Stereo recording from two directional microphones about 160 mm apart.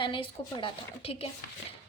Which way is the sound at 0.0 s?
30° left (ahead or behind).